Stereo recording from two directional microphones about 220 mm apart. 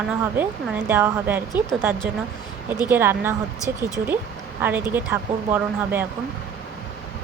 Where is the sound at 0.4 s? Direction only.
10° right (ahead or behind).